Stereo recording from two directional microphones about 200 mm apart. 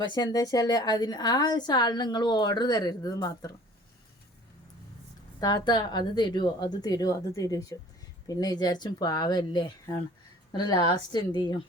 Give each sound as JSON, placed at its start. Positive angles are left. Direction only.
{"t": 0.1, "sound": "a woman's voice", "side_deg": 20}
{"t": 5.4, "sound": "a woman's voice", "side_deg": 20}